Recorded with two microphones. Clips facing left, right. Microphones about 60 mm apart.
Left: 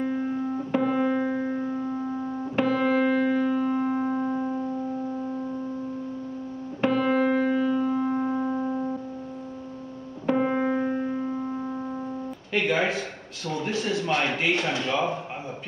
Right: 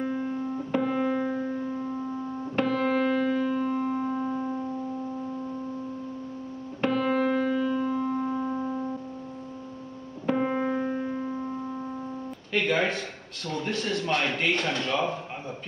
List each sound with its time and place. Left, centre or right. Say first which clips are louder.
0.7 s music: left 2 dB; centre
1.2 s music: left 2 dB; left
2.5 s music: left 2 dB; centre
6.8 s music: left 2 dB; centre
10.2 s music: left 2 dB; centre
12.5 s a sound: left 1 dB; centre
13.5 s speech: left 2 dB; centre